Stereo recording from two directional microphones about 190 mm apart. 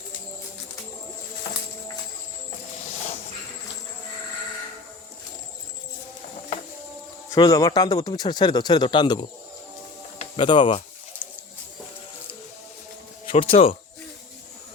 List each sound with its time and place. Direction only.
7.3 s speech: 20° left (ahead or behind)
10.3 s speech: 25° left (ahead or behind)
13.2 s speech: 30° left (ahead or behind)